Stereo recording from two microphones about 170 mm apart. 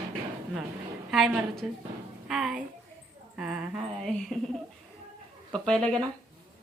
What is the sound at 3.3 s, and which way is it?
Speech, 5° right (ahead or behind).